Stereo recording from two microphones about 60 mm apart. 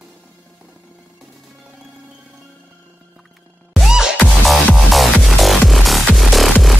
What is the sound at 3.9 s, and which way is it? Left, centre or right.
Music, centre.